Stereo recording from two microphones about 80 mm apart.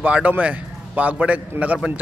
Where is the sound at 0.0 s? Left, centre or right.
Centre.